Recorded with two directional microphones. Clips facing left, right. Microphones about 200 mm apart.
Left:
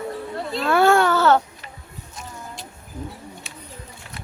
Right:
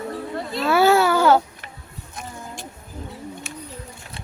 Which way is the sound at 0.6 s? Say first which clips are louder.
Even; 5° right (ahead or behind).